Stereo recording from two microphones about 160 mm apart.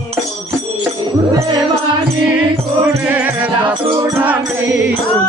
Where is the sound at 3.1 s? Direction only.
10° right (ahead or behind).